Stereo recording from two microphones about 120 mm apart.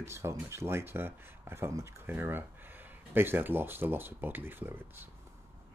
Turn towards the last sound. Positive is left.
turn(degrees=-15)  # may be behind; listen again after turning